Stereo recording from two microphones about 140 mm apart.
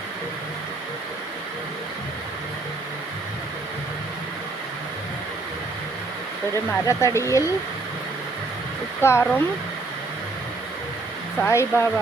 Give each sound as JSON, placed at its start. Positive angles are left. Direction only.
{"t": 6.7, "sound": "speech", "side_deg": 20}
{"t": 9.0, "sound": "speech", "side_deg": 20}
{"t": 11.4, "sound": "speech", "side_deg": 20}